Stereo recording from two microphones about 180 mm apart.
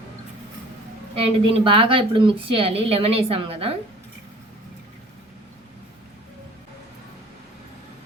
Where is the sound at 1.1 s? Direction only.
30° right (ahead or behind).